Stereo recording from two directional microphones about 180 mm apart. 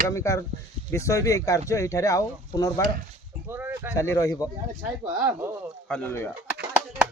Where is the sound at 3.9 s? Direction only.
15° left (ahead or behind).